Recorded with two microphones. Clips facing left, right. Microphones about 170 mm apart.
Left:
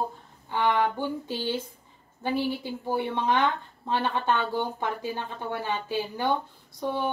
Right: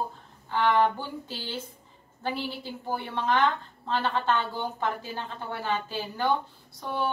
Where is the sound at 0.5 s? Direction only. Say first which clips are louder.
Right 1 dB; 15° left (ahead or behind).